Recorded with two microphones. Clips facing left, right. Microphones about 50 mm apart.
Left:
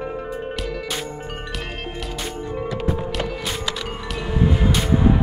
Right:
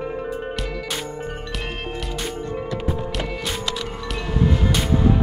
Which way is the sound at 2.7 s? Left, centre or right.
Centre.